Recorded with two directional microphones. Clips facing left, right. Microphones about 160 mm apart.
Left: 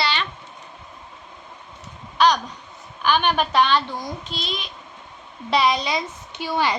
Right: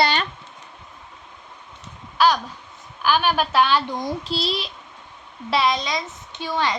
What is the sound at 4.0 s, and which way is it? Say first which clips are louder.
Speech: right 5 dB; 30° right (ahead or behind).